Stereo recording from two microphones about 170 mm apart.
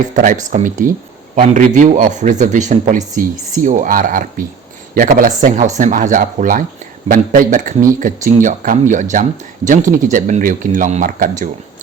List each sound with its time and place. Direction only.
0.1 s speech: 50° right (ahead or behind)